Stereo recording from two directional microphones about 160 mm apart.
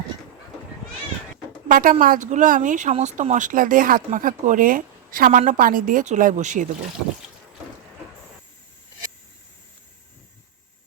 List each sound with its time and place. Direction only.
1.6 s speech: 60° right (ahead or behind)